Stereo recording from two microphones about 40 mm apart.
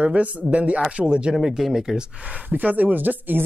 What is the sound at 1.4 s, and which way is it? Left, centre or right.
Speech, centre.